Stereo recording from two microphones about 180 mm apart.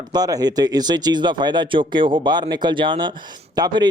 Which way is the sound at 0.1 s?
20° right (ahead or behind).